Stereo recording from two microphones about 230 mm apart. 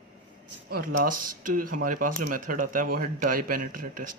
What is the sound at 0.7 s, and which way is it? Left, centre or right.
Speech, right.